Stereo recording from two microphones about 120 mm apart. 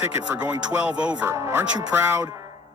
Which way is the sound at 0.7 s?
10° right (ahead or behind).